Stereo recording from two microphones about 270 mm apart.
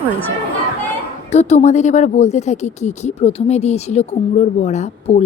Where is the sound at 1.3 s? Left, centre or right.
Left.